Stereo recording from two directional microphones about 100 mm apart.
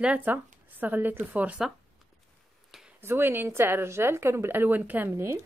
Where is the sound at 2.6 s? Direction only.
5° right (ahead or behind).